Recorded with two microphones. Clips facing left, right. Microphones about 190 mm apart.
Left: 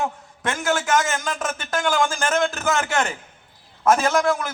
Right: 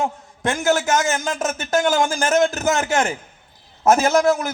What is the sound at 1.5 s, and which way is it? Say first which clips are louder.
A man's voice: right 5 dB; 45° right (ahead or behind).